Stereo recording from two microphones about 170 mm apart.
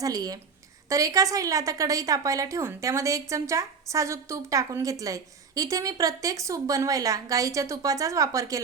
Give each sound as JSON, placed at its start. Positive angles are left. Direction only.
{"t": 0.0, "sound": "speech", "side_deg": -20}